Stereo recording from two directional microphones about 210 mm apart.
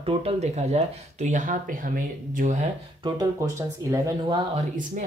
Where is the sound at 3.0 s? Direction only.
15° right (ahead or behind).